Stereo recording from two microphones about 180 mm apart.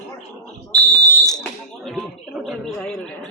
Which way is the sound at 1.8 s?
Centre (ahead or behind).